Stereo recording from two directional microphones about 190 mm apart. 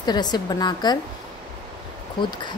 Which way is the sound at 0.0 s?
20° left (ahead or behind).